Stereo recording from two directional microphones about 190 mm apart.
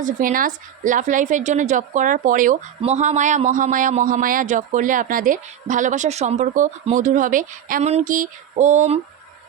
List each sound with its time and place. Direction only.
0.0 s a woman's voice: 45° right (ahead or behind)